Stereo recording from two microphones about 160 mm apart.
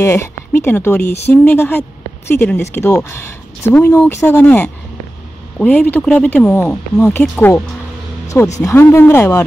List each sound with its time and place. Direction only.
0.0 s speech: 15° left (ahead or behind)
8.6 s speech: 15° left (ahead or behind)